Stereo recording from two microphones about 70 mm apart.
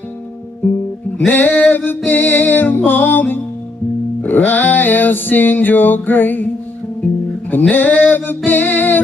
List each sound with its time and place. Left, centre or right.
1.1 s music: left
7.5 s music: left